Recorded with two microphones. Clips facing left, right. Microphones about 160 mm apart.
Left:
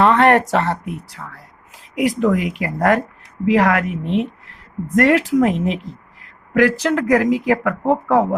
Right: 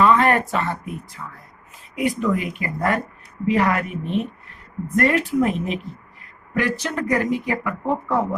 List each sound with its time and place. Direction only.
0.0 s speech: 70° left (ahead or behind); by 8.4 s 90° left